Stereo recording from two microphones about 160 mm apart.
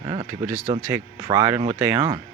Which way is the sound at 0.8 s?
15° right (ahead or behind).